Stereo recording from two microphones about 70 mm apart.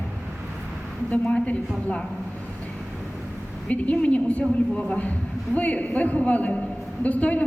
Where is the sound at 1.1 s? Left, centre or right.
Centre.